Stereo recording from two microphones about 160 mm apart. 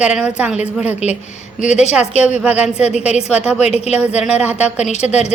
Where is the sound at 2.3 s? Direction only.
10° right (ahead or behind).